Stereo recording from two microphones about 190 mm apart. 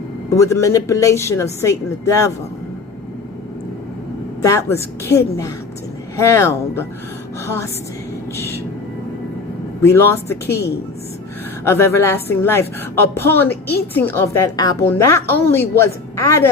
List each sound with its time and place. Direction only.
0.3 s a woman's voice: 15° left (ahead or behind)
4.4 s a woman's voice: 15° left (ahead or behind)
9.8 s a woman's voice: 15° left (ahead or behind)
11.6 s a woman's voice: 15° left (ahead or behind)